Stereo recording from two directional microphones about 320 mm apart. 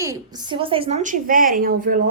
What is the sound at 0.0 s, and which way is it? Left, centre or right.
A woman's voice, centre.